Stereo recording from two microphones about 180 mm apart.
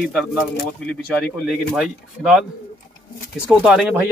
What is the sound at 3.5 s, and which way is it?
Speech, 5° right (ahead or behind).